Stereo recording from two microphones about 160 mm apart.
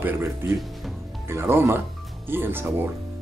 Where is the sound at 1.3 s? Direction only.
15° right (ahead or behind).